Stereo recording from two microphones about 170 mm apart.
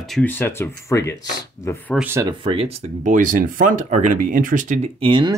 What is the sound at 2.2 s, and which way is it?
Speech, 30° right (ahead or behind).